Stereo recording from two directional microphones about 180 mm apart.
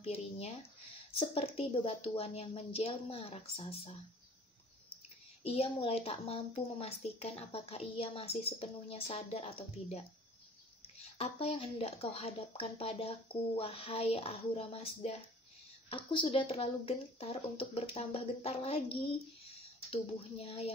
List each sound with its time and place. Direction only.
0.0 s speech: 35° left (ahead or behind)
5.4 s speech: 35° left (ahead or behind)
11.1 s speech: 35° left (ahead or behind)